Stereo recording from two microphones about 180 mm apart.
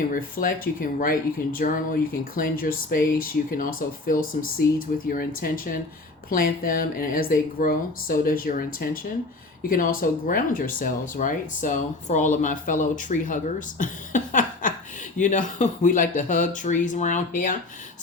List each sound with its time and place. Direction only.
0.1 s speech: 50° left (ahead or behind)